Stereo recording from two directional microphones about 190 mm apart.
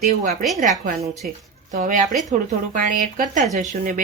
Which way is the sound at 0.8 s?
35° right (ahead or behind).